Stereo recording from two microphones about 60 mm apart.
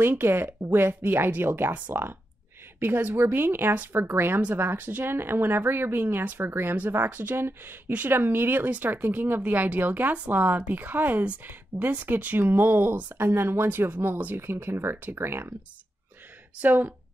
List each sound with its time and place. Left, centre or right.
0.0 s speech: right
1.7 s speech: right
11.7 s speech: right
12.1 s speech: right
13.7 s speech: right
16.5 s speech: right